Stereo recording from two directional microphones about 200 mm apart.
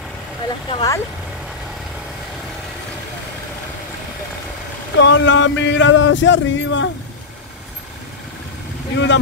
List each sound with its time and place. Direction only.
0.7 s speech: 25° left (ahead or behind)
4.9 s speech: 70° left (ahead or behind)
8.9 s speech: 65° left (ahead or behind)